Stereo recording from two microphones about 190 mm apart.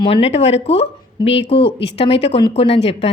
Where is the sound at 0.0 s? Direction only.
30° left (ahead or behind).